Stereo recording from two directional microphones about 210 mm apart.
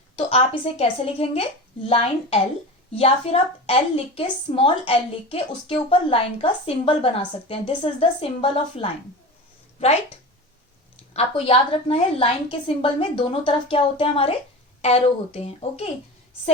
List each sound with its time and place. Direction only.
0.3 s speech: 30° left (ahead or behind)
11.1 s speech: 30° left (ahead or behind)